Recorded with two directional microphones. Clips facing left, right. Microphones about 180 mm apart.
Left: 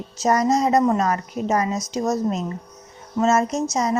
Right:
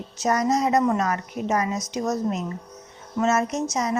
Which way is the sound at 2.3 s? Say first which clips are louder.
Left 2 dB; 30° left (ahead or behind).